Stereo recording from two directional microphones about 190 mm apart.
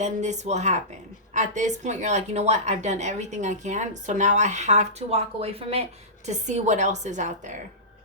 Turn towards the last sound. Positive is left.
turn(degrees=-40)  # may be behind; listen again after turning